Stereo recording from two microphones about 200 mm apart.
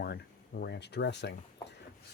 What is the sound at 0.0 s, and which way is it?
Speech, 50° left (ahead or behind).